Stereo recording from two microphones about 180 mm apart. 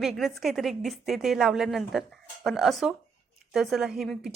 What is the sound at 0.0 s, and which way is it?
A woman's voice, centre (ahead or behind).